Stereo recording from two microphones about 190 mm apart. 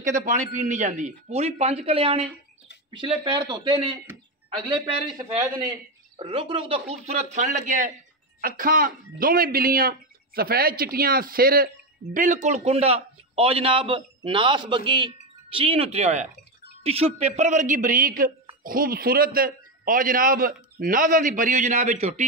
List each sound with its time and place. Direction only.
0.2 s a man's voice: 40° right (ahead or behind)